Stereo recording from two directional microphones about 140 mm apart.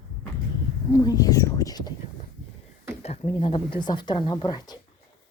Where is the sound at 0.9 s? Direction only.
25° left (ahead or behind).